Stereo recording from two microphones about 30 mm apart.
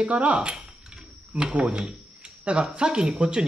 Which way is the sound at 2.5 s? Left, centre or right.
Right.